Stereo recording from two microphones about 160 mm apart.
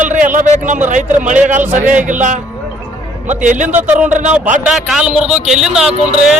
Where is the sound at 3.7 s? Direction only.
10° right (ahead or behind).